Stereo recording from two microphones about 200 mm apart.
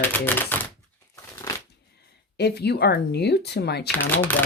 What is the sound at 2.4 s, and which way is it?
Speech, 55° left (ahead or behind).